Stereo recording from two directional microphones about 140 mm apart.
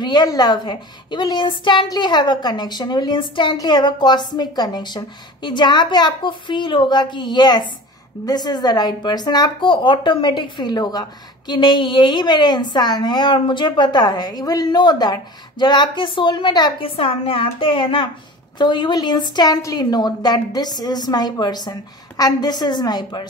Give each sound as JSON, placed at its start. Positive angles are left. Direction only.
{"t": 0.0, "sound": "a woman's voice", "side_deg": 30}